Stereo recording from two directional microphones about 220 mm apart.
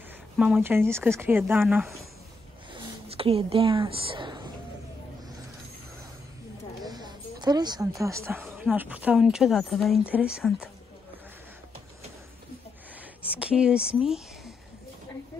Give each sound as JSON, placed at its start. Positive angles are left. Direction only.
{"t": 0.4, "sound": "speech", "side_deg": -5}
{"t": 2.7, "sound": "speech", "side_deg": -25}
{"t": 6.8, "sound": "a woman's voice", "side_deg": -20}
{"t": 13.4, "sound": "speech", "side_deg": -5}